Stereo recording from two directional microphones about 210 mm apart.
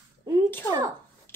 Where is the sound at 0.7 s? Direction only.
15° right (ahead or behind).